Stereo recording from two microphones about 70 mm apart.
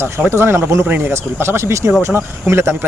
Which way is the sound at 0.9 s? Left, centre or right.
Right.